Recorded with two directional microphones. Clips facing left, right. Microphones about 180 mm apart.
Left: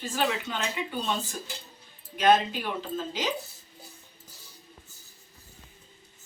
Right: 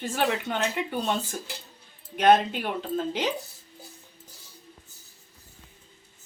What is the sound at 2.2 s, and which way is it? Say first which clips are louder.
Speech: right 2 dB; 55° right (ahead or behind).